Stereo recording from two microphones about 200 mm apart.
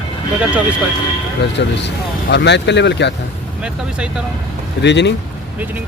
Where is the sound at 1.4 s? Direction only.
60° left (ahead or behind).